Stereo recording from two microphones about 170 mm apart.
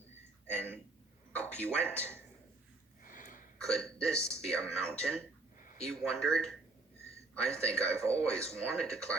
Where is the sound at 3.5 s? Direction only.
5° left (ahead or behind).